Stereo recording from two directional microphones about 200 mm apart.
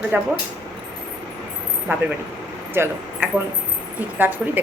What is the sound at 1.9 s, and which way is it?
A woman's voice, 10° right (ahead or behind).